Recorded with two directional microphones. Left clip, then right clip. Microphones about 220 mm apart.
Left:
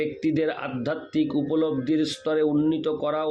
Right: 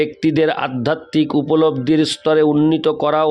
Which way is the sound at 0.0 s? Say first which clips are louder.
Right 9 dB; 50° right (ahead or behind).